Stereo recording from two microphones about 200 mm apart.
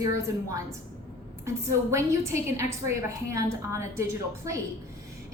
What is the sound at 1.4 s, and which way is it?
A woman's voice, 15° right (ahead or behind).